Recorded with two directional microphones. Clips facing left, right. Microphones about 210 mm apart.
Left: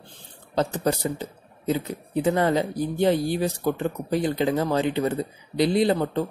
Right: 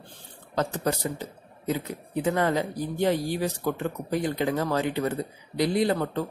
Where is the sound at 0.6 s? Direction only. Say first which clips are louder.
Left 3 dB; 30° left (ahead or behind).